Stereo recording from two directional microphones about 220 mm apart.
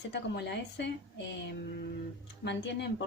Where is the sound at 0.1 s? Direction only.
50° left (ahead or behind).